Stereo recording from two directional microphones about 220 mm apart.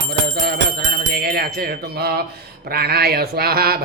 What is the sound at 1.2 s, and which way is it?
Music, 45° right (ahead or behind).